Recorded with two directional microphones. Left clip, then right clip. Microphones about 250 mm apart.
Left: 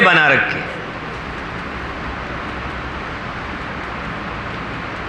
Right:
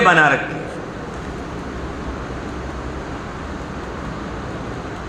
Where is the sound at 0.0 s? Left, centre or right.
Left.